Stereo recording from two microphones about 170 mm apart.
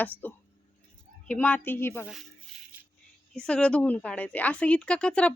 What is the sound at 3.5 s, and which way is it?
A woman's voice, 5° left (ahead or behind).